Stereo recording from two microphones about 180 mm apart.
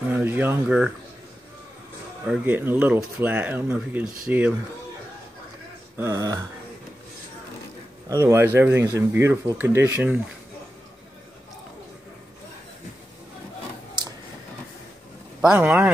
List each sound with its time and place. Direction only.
0.1 s speech: 10° right (ahead or behind)
2.2 s speech: 5° right (ahead or behind)
5.9 s speech: 15° right (ahead or behind)
8.1 s speech: 15° right (ahead or behind)
15.4 s speech: 10° right (ahead or behind)